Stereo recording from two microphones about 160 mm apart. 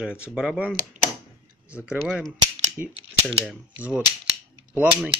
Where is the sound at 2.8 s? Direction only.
10° right (ahead or behind).